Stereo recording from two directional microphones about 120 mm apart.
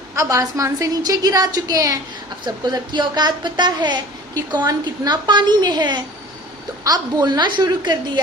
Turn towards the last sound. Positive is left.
turn(degrees=-40)  # may be behind; listen again after turning